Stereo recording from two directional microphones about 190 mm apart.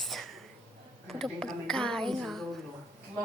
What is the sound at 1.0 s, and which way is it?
Speech, 5° left (ahead or behind).